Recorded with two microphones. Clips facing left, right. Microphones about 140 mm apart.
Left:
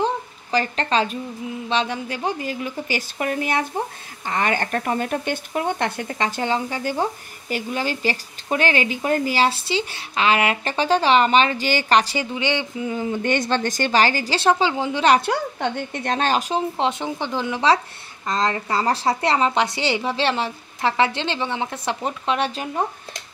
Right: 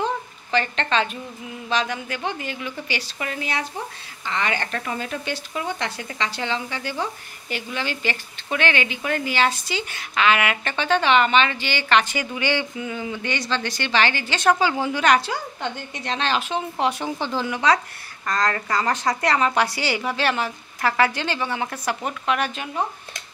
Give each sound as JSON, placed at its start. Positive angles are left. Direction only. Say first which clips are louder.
{"t": 0.0, "sound": "a sound", "louder": "left 3 dB", "side_deg": 35}
{"t": 1.7, "sound": "speech", "louder": "left 1 dB", "side_deg": 30}
{"t": 12.4, "sound": "speech", "louder": "right 1 dB", "side_deg": 20}
{"t": 12.8, "sound": "speech", "louder": "left 5 dB", "side_deg": 40}
{"t": 15.2, "sound": "speech", "louder": "left 5 dB", "side_deg": 55}
{"t": 16.7, "sound": "speech", "louder": "left 1 dB", "side_deg": 25}